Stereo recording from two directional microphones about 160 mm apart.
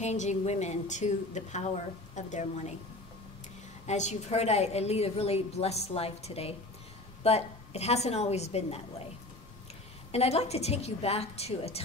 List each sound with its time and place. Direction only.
0.0 s a woman's voice: 45° left (ahead or behind)
3.8 s a woman's voice: 45° left (ahead or behind)
10.1 s a woman's voice: 40° left (ahead or behind)